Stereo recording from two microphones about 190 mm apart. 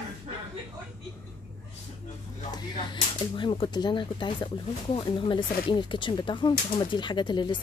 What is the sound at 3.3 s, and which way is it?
Speech, 25° left (ahead or behind).